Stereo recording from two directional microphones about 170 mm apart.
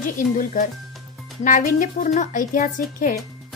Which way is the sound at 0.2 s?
50° left (ahead or behind).